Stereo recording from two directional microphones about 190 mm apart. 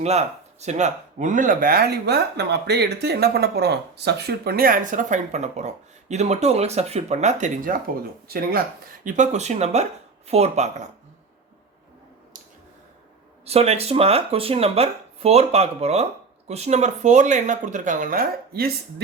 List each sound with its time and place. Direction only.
0.0 s speech: 35° right (ahead or behind); by 8.6 s 50° right (ahead or behind)
9.0 s speech: 40° right (ahead or behind)
13.4 s speech: 30° right (ahead or behind); by 18.7 s 50° right (ahead or behind)